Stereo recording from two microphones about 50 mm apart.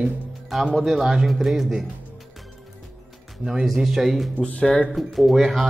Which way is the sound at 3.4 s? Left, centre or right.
Centre.